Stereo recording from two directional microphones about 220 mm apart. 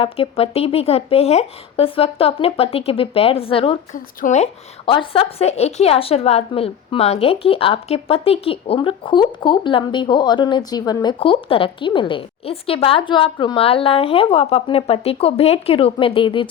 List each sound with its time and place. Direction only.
0.0 s a woman's voice: 25° left (ahead or behind)
4.9 s a woman's voice: 20° left (ahead or behind)